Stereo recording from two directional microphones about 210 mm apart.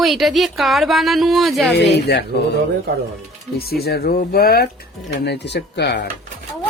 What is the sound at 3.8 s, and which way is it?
Speech, 45° left (ahead or behind).